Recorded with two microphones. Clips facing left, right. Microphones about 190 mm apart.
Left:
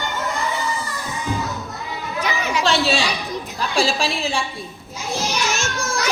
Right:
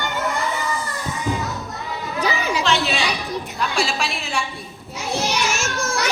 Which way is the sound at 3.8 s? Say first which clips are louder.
Left 6 dB; 30° left (ahead or behind).